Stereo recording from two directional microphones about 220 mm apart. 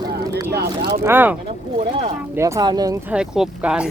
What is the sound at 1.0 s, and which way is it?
Speech, 10° right (ahead or behind).